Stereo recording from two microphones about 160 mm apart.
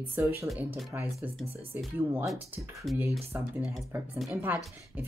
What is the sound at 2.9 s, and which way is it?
Speech, centre (ahead or behind).